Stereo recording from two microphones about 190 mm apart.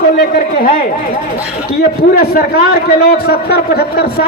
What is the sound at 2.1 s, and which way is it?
A man's voice, 55° left (ahead or behind).